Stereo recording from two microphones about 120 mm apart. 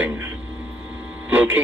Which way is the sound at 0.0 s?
20° right (ahead or behind).